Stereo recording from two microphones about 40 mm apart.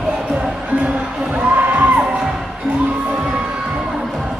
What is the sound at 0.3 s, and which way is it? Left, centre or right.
Music, right.